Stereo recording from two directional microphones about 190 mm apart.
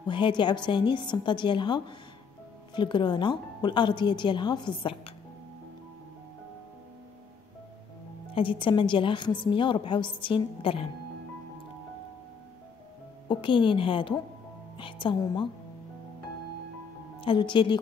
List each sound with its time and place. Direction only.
0.0 s a woman's voice: 25° left (ahead or behind)
8.3 s a woman's voice: 30° left (ahead or behind)
13.3 s a woman's voice: 25° left (ahead or behind)
17.2 s a woman's voice: 25° left (ahead or behind)